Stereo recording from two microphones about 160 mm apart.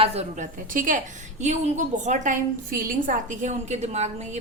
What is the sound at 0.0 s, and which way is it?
Speech, 40° right (ahead or behind).